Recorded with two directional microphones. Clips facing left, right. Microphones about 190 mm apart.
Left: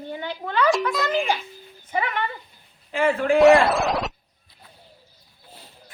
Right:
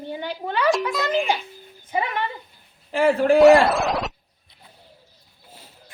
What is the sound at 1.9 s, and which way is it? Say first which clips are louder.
Speech: right 1 dB; 15° right (ahead or behind).